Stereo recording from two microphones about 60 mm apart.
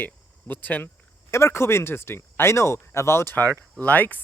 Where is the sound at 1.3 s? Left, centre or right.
Left.